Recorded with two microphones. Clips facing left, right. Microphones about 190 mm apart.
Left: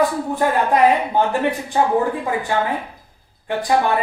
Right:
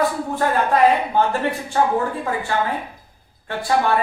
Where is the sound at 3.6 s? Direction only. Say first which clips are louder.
Left 1 dB; 15° left (ahead or behind).